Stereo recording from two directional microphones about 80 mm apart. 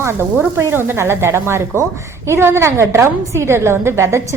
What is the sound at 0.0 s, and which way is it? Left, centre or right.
A woman's voice, right.